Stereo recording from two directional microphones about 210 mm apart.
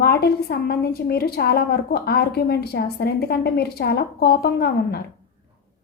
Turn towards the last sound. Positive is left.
turn(degrees=50)  # may be behind; listen again after turning